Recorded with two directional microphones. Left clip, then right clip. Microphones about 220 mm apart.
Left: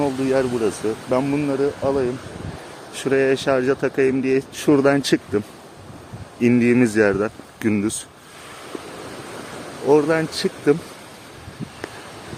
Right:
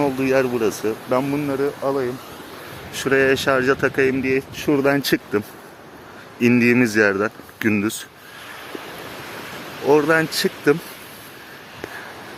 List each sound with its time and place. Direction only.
0.0 s speech: centre (ahead or behind)
1.1 s speech: 15° left (ahead or behind)
2.9 s speech: 5° left (ahead or behind)
4.2 s speech: 20° left (ahead or behind)
4.5 s speech: 30° left (ahead or behind)
4.8 s speech: 15° left (ahead or behind)
6.4 s speech: centre (ahead or behind)
9.8 s speech: centre (ahead or behind)